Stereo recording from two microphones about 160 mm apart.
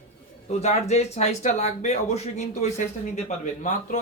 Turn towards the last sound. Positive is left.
turn(degrees=45)  # may be behind; listen again after turning